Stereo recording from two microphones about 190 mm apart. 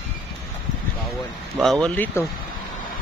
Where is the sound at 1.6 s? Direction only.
Centre (ahead or behind).